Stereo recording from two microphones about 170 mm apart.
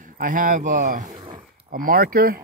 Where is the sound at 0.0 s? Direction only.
50° right (ahead or behind).